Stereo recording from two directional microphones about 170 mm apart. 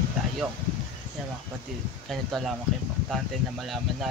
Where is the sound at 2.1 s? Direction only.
Centre (ahead or behind).